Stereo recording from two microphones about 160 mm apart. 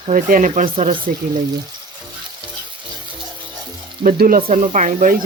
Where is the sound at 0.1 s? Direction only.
55° right (ahead or behind).